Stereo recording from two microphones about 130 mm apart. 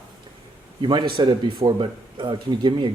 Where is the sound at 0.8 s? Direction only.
35° right (ahead or behind).